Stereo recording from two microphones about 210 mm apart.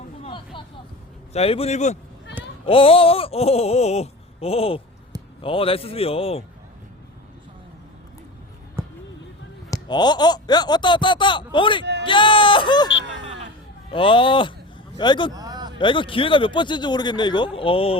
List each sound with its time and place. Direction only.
0.2 s vehicle: 25° left (ahead or behind)
1.3 s a man's voice: 30° left (ahead or behind)
8.8 s a sound: 10° right (ahead or behind)
9.6 s speech: 20° left (ahead or behind)
13.9 s speech: 25° left (ahead or behind)
15.3 s a sound: 20° right (ahead or behind)
15.8 s speech: 25° left (ahead or behind)